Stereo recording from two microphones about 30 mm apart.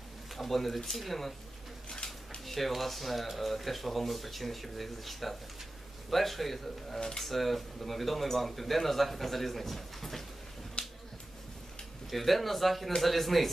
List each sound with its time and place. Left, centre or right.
0.4 s speech: centre
2.4 s speech: centre
7.0 s speech: centre
7.2 s speech: centre
10.8 s finger snapping: left
12.1 s speech: centre